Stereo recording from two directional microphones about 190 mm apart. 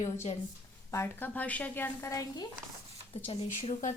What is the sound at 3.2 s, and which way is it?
Speech, 40° left (ahead or behind).